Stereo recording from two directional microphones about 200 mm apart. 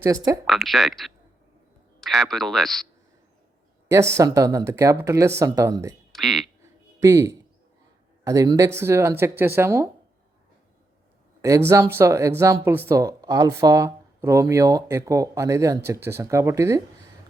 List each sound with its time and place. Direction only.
0.0 s speech: 15° right (ahead or behind)
0.4 s speech: centre (ahead or behind)
3.8 s speech: 15° right (ahead or behind)
6.1 s speech: centre (ahead or behind)
7.0 s speech: 15° right (ahead or behind)
11.4 s speech: 15° right (ahead or behind)